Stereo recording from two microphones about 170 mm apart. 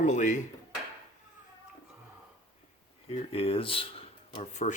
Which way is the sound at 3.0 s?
35° left (ahead or behind).